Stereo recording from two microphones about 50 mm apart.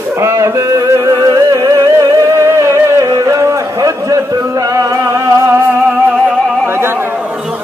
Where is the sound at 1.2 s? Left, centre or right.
Right.